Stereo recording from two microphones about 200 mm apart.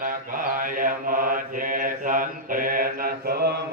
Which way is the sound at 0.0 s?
45° right (ahead or behind).